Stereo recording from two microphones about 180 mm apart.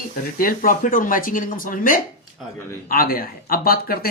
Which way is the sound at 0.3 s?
50° left (ahead or behind).